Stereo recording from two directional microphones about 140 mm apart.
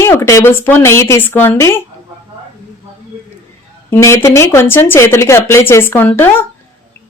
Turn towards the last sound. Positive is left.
turn(degrees=15)  # may be behind; listen again after turning